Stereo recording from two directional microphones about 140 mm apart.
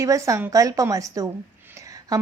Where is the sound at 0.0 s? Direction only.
20° right (ahead or behind).